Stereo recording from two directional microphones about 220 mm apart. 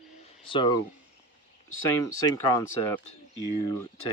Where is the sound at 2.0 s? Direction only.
15° left (ahead or behind).